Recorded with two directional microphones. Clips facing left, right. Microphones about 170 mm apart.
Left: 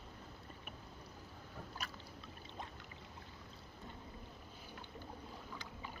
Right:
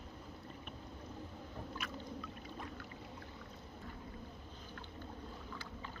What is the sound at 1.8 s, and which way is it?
Boat, 40° left (ahead or behind).